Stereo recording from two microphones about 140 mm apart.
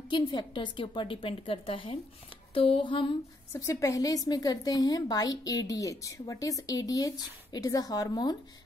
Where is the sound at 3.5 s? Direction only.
20° left (ahead or behind).